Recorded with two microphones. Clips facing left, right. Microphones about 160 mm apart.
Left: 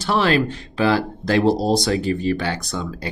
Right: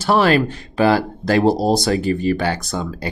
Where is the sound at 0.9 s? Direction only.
5° right (ahead or behind).